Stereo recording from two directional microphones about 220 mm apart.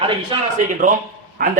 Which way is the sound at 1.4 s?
40° right (ahead or behind).